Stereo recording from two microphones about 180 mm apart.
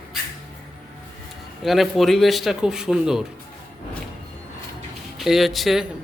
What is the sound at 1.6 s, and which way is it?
A man's voice, centre (ahead or behind).